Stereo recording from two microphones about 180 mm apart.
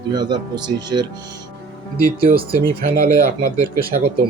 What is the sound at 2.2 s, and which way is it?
Speech, 55° right (ahead or behind).